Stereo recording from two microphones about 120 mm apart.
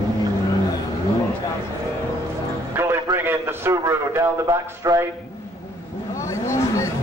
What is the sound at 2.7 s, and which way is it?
A man's voice, 20° right (ahead or behind).